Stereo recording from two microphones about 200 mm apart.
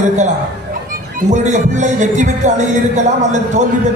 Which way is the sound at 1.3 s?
35° right (ahead or behind).